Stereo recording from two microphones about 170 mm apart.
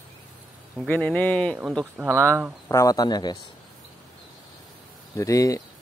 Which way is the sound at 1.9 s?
15° right (ahead or behind).